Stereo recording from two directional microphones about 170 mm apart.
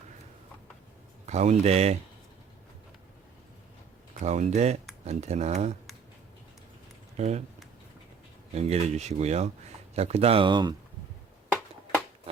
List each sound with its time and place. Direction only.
1.3 s speech: 40° right (ahead or behind)
4.2 s speech: 45° right (ahead or behind)
7.2 s speech: 40° right (ahead or behind)
8.5 s speech: 40° right (ahead or behind)